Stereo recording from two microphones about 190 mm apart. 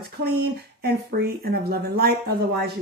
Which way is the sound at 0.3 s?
55° right (ahead or behind).